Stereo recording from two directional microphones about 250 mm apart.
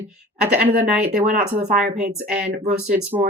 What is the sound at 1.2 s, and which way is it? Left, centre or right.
Speech, right.